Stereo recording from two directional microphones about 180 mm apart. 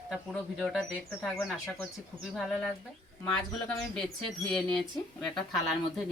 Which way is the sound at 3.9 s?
Centre (ahead or behind).